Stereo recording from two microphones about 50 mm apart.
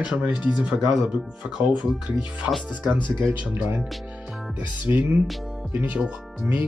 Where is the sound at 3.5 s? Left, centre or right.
Right.